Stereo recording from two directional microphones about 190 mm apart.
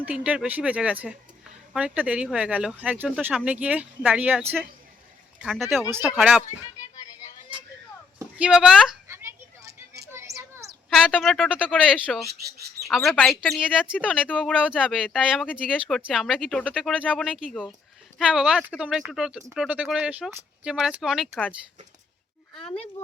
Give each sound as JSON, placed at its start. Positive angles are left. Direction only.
{"t": 0.0, "sound": "speech", "side_deg": -5}
{"t": 8.2, "sound": "speech", "side_deg": -5}
{"t": 9.0, "sound": "a sound", "side_deg": -15}
{"t": 10.8, "sound": "speech", "side_deg": 0}
{"t": 12.3, "sound": "bird", "side_deg": -55}
{"t": 12.9, "sound": "speech", "side_deg": 0}
{"t": 22.5, "sound": "speech", "side_deg": 30}